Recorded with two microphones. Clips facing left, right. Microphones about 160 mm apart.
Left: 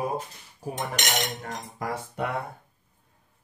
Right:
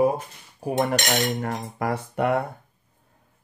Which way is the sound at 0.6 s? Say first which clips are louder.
Right 8 dB; 65° right (ahead or behind).